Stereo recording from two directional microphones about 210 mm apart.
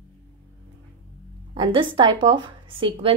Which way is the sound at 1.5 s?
25° right (ahead or behind).